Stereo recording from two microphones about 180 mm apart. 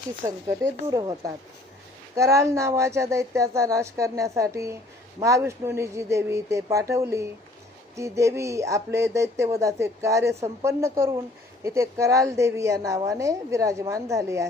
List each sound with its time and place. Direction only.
0.2 s a woman's voice: 15° right (ahead or behind)